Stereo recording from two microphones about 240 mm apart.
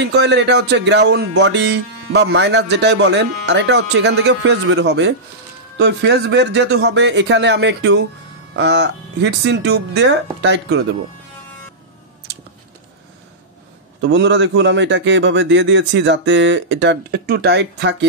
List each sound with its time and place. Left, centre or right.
0.0 s speech: right
14.0 s speech: right